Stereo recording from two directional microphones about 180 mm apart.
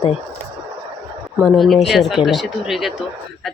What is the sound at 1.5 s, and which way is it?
A woman's voice, centre (ahead or behind).